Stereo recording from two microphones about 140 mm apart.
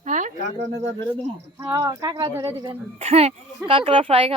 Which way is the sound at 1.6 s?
25° right (ahead or behind).